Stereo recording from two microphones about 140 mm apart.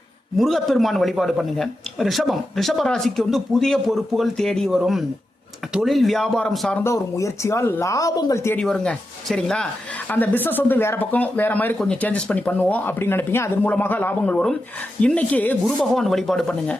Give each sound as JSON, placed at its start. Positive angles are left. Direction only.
{"t": 0.3, "sound": "a man's voice", "side_deg": 0}
{"t": 6.8, "sound": "speech", "side_deg": 20}
{"t": 8.5, "sound": "a man's voice", "side_deg": 5}